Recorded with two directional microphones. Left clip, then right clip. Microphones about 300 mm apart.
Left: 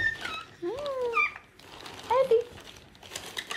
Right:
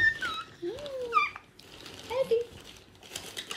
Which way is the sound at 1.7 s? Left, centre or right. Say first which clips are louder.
Left 3 dB; centre.